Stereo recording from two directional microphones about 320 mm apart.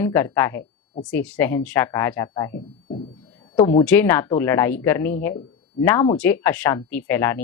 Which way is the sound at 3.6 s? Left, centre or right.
Centre.